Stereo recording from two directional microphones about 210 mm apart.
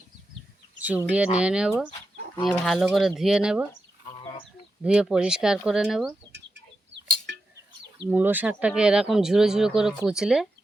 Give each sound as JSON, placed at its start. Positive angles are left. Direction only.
{"t": 0.8, "sound": "speech", "side_deg": -10}
{"t": 1.9, "sound": "chicken", "side_deg": 20}
{"t": 2.5, "sound": "speech", "side_deg": 0}
{"t": 4.8, "sound": "speech", "side_deg": -5}
{"t": 6.3, "sound": "chicken", "side_deg": -55}
{"t": 8.0, "sound": "speech", "side_deg": -10}